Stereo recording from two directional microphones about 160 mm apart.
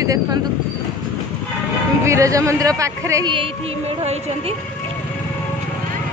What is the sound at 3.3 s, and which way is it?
Music, 35° right (ahead or behind).